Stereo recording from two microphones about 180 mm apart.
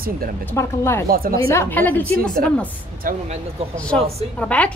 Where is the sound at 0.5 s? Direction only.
15° left (ahead or behind).